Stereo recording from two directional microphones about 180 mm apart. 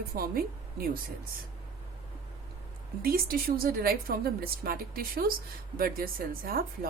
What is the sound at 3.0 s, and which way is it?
Speech, 55° right (ahead or behind).